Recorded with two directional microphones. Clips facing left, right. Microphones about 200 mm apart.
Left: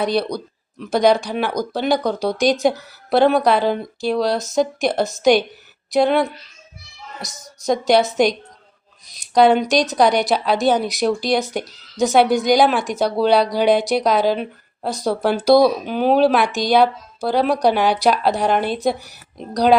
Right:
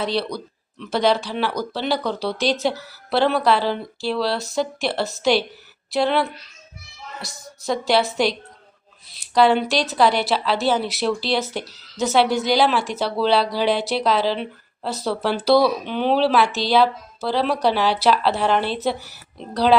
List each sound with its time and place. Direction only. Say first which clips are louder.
0.0 s a woman's voice: left 4 dB; 15° left (ahead or behind)
15.9 s speech: left 4 dB; 45° left (ahead or behind)
16.3 s speech: left 2 dB; 15° left (ahead or behind)